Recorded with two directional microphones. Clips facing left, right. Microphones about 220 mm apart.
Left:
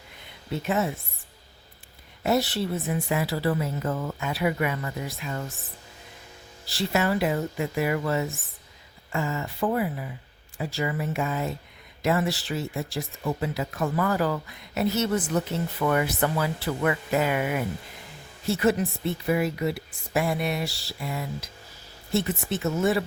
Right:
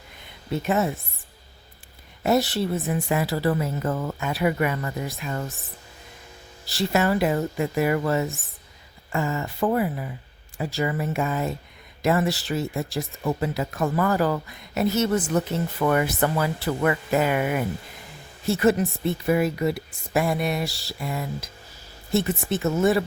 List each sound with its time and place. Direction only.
2.2 s a woman's voice: 45° right (ahead or behind)
6.7 s a woman's voice: 45° right (ahead or behind)